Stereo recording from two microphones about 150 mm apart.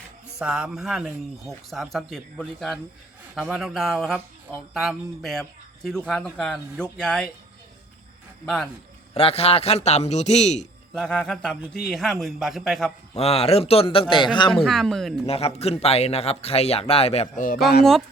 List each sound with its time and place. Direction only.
0.3 s speech: 5° right (ahead or behind)
8.4 s speech: centre (ahead or behind)
9.1 s speech: 40° left (ahead or behind)
10.9 s speech: 5° left (ahead or behind)
13.1 s a man's voice: 40° left (ahead or behind)
14.5 s speech: 5° left (ahead or behind)
15.3 s speech: 40° left (ahead or behind)